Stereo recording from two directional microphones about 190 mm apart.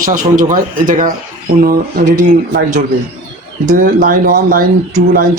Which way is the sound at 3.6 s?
45° right (ahead or behind).